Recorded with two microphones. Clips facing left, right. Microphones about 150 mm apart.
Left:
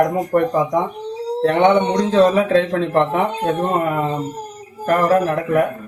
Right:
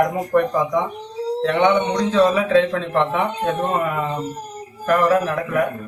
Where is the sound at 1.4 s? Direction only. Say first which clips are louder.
Left 3 dB; 45° left (ahead or behind).